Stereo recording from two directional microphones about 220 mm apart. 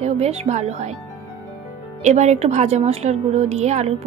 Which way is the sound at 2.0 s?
30° right (ahead or behind).